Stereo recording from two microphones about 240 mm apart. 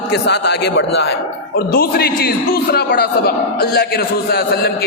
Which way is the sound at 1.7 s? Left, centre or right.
Left.